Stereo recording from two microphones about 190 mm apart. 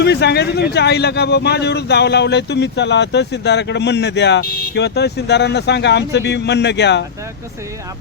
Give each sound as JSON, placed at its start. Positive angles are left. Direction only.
{"t": 0.0, "sound": "speech", "side_deg": 60}